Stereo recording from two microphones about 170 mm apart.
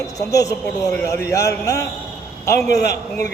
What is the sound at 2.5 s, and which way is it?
Speech, 75° left (ahead or behind).